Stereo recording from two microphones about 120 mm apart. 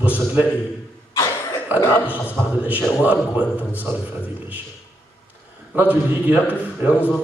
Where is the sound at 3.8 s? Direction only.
15° right (ahead or behind).